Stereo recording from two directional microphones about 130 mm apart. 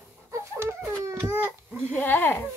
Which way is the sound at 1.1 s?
20° right (ahead or behind).